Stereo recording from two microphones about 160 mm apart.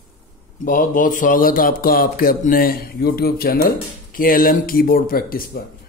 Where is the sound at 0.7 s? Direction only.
55° left (ahead or behind).